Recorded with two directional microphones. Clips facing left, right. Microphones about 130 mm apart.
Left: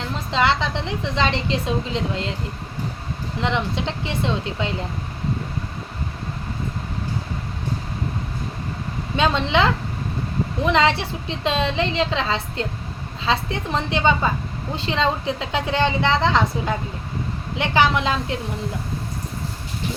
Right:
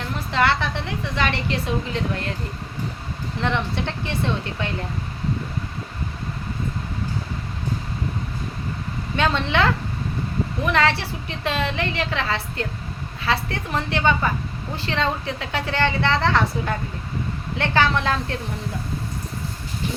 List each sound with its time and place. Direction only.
0.1 s a woman's voice: 20° left (ahead or behind)
3.4 s a woman's voice: 15° left (ahead or behind)
9.1 s a woman's voice: 20° left (ahead or behind)